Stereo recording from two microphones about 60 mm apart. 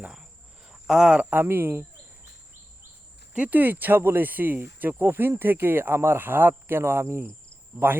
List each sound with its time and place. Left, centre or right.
0.1 s cricket: centre
1.4 s speech: right
3.3 s speech: right